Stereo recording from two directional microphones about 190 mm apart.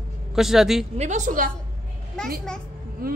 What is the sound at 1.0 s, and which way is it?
Speech, 40° right (ahead or behind).